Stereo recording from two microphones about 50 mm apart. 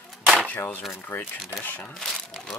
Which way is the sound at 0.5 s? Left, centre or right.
Left.